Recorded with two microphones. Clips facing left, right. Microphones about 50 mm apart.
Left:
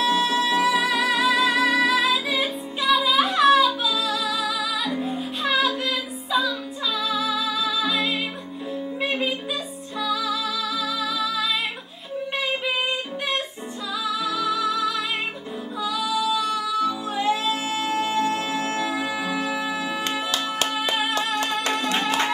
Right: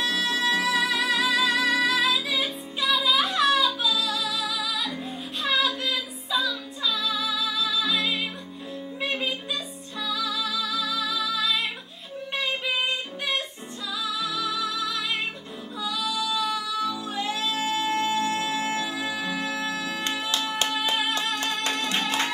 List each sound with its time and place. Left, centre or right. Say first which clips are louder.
0.0 s music: left 4 dB; centre
14.0 s music: left 5 dB; centre
21.9 s music: left 3 dB; centre